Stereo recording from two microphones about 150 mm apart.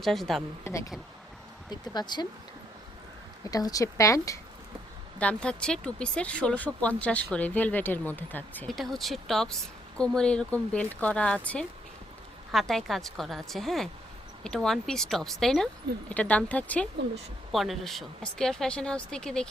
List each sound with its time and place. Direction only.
0.0 s speech: centre (ahead or behind)
0.6 s speech: 20° left (ahead or behind)
3.5 s speech: 25° left (ahead or behind)
5.2 s speech: 10° left (ahead or behind)
8.7 s speech: centre (ahead or behind)
12.5 s speech: centre (ahead or behind)